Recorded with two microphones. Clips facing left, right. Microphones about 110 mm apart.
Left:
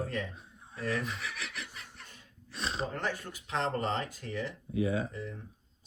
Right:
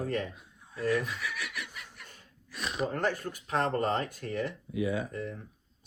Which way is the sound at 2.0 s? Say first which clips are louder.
Right 1 dB; 45° right (ahead or behind).